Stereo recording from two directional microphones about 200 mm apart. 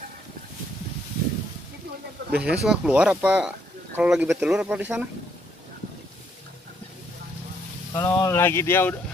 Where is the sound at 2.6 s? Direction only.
5° right (ahead or behind).